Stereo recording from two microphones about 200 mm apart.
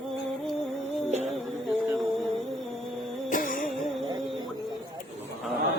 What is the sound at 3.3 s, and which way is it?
Music, 45° left (ahead or behind).